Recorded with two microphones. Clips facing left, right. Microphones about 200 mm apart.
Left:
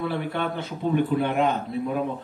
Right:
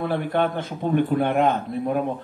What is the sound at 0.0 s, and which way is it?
A man's voice, 50° right (ahead or behind).